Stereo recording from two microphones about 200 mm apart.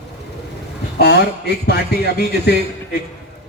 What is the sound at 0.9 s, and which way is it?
A man's voice, 55° left (ahead or behind).